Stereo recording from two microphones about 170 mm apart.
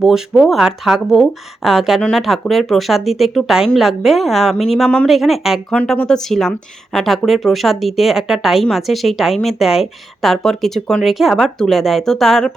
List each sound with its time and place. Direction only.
0.0 s speech: centre (ahead or behind)